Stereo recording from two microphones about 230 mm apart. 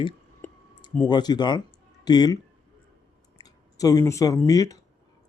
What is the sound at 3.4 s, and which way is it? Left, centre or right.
Speech, centre.